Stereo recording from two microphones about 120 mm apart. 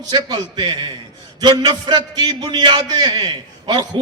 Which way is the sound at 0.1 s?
35° right (ahead or behind).